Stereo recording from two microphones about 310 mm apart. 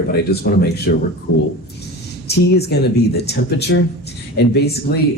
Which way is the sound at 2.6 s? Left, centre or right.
Left.